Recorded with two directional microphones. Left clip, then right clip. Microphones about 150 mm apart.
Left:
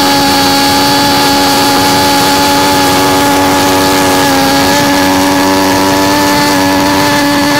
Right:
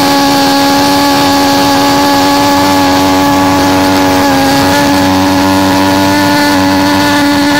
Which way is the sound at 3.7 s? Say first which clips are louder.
Even; 15° left (ahead or behind).